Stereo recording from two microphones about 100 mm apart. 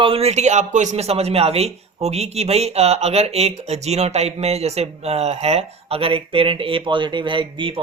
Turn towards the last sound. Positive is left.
turn(degrees=-55)  # may be behind; listen again after turning